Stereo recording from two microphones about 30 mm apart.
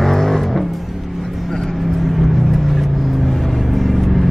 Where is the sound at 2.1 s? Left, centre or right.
Centre.